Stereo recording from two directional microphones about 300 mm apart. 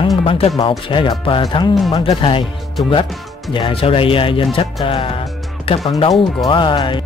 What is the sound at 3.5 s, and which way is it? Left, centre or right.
Speech, centre.